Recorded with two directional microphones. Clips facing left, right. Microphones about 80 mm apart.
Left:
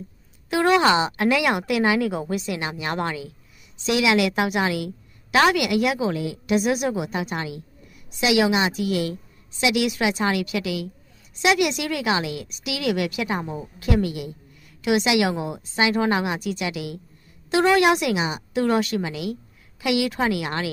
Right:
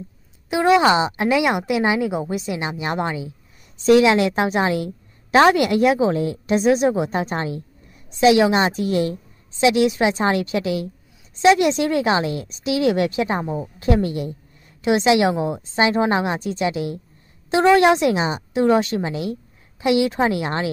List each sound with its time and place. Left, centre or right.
0.5 s a woman's voice: centre
3.7 s a woman's voice: right
4.1 s a woman's voice: right
13.4 s a woman's voice: centre
13.7 s a woman's voice: right